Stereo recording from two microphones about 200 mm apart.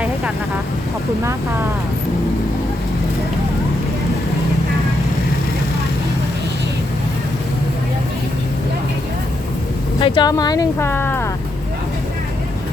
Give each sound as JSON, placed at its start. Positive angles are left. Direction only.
{"t": 10.0, "sound": "speech", "side_deg": 25}